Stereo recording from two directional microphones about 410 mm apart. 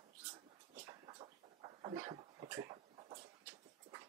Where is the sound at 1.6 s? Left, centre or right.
Centre.